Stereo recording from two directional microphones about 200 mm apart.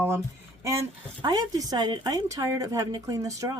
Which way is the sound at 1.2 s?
20° right (ahead or behind).